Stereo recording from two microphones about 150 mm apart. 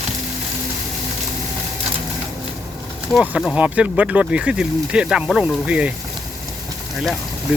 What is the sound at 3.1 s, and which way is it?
Speech, 5° right (ahead or behind).